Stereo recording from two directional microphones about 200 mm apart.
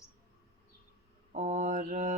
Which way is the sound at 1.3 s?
35° right (ahead or behind).